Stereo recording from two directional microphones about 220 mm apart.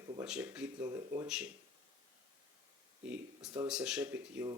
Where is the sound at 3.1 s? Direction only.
5° right (ahead or behind).